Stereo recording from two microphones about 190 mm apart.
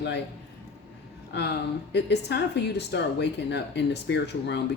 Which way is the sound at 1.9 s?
65° left (ahead or behind).